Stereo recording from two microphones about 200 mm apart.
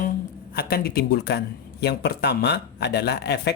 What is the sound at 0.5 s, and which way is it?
Speech, 50° left (ahead or behind).